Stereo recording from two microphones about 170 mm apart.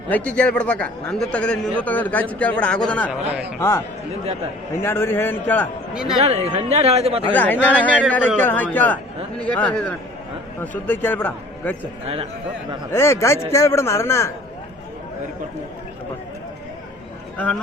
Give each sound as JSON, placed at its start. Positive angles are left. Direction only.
{"t": 0.1, "sound": "a man's voice", "side_deg": 10}
{"t": 6.2, "sound": "speech", "side_deg": -40}
{"t": 7.3, "sound": "a man's voice", "side_deg": 10}
{"t": 12.0, "sound": "speech", "side_deg": -35}
{"t": 12.9, "sound": "a man's voice", "side_deg": 15}
{"t": 17.3, "sound": "a man's voice", "side_deg": 10}